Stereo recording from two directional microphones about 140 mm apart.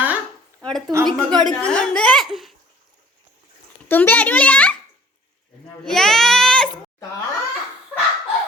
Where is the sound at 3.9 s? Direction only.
10° left (ahead or behind).